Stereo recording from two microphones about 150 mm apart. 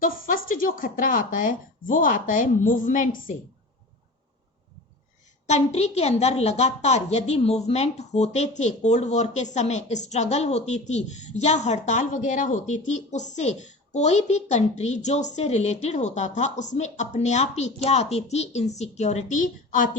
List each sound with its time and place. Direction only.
0.0 s speech: 65° left (ahead or behind)
5.5 s a woman's voice: 45° left (ahead or behind)